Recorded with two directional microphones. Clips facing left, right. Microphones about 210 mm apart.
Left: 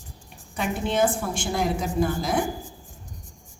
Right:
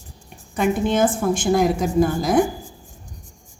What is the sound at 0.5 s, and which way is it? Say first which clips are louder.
A woman's voice: right 6 dB; 45° right (ahead or behind).